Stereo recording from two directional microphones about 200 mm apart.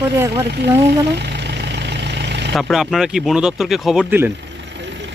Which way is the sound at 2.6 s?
Centre (ahead or behind).